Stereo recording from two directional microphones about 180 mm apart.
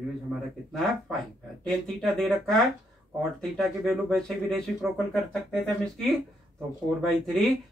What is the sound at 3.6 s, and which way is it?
Speech, centre (ahead or behind).